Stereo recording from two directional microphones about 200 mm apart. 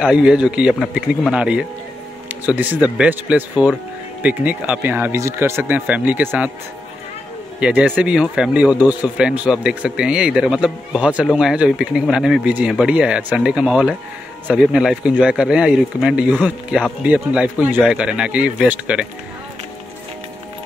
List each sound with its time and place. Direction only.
0.0 s speech: 5° right (ahead or behind)
7.6 s speech: 5° right (ahead or behind)